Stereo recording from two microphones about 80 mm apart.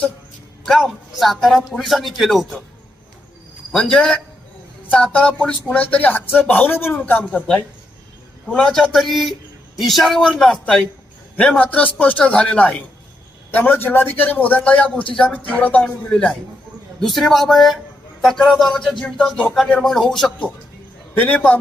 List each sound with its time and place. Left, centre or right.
0.6 s a man's voice: centre
3.8 s speech: centre
7.3 s a man's voice: centre
21.2 s speech: centre